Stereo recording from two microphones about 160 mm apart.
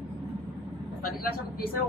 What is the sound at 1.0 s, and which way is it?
Vehicle, 70° left (ahead or behind).